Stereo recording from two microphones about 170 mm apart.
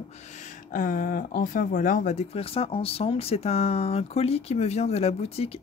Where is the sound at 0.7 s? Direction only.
55° left (ahead or behind).